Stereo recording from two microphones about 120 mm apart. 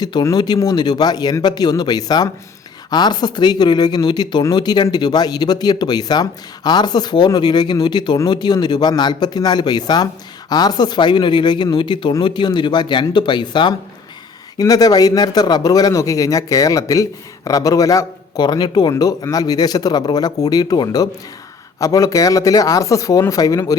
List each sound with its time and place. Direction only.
0.0 s speech: 35° left (ahead or behind)